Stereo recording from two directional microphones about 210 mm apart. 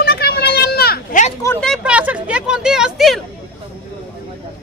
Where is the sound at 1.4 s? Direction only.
10° left (ahead or behind).